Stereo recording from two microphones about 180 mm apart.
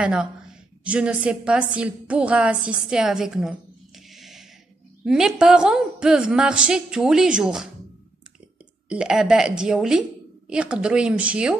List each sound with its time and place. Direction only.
0.0 s a woman's voice: 5° right (ahead or behind)
8.8 s a woman's voice: 5° right (ahead or behind)